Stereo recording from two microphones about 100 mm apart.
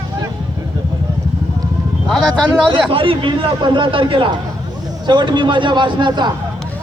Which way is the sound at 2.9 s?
60° right (ahead or behind).